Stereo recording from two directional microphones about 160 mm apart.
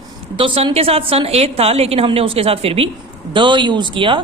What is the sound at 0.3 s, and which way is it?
A woman's voice, 35° right (ahead or behind).